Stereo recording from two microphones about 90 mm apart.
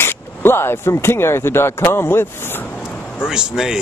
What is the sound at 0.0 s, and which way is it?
Speech, 25° left (ahead or behind).